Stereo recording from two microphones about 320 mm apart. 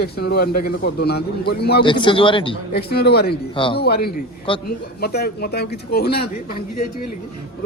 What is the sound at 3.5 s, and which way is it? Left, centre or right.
Speech, centre.